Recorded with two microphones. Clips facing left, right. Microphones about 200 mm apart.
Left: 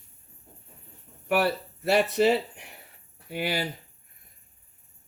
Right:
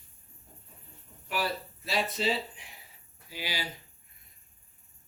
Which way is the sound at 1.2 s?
65° left (ahead or behind).